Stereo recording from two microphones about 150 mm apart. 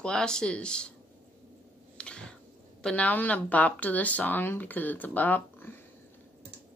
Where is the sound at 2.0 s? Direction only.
5° left (ahead or behind).